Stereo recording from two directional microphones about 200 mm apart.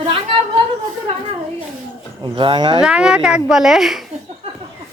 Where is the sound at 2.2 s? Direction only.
25° right (ahead or behind).